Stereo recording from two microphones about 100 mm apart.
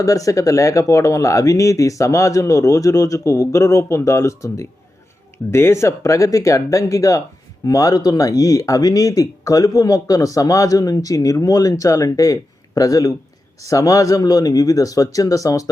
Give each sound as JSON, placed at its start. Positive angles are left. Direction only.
{"t": 0.0, "sound": "speech", "side_deg": 35}